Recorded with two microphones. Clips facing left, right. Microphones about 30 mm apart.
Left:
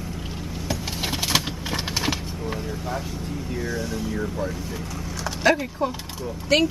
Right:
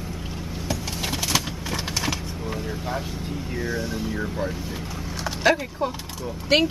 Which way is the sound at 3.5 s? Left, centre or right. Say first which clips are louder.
Even; centre.